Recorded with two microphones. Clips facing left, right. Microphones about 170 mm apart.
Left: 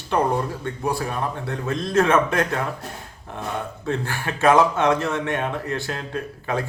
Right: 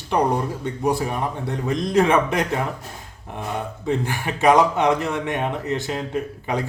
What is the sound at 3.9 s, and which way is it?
Speech, 15° right (ahead or behind).